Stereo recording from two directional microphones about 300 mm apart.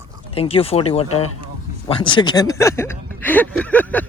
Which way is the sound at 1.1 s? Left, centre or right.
Left.